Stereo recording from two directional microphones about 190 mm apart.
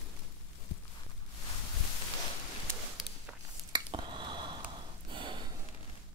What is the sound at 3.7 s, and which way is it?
Finger snapping, 25° right (ahead or behind).